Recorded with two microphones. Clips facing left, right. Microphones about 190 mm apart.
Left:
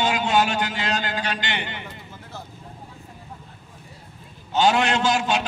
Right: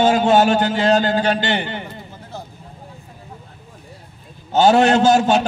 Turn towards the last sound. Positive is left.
turn(degrees=-40)  # may be behind; listen again after turning